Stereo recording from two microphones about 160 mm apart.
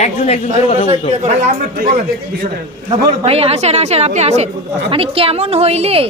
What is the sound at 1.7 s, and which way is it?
Speech, 70° right (ahead or behind).